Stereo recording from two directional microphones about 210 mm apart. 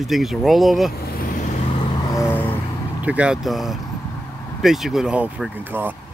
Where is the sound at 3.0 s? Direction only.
5° right (ahead or behind).